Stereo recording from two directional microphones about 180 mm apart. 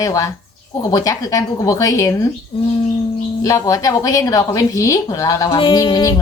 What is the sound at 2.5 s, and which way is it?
Speech, 30° left (ahead or behind).